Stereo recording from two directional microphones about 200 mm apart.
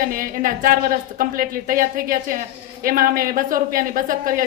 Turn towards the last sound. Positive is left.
turn(degrees=-45)  # may be behind; listen again after turning